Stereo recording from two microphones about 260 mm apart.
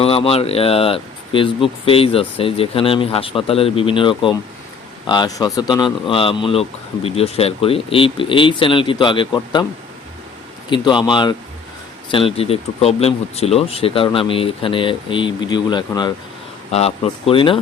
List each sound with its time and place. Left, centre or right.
0.0 s speech: left
10.7 s speech: centre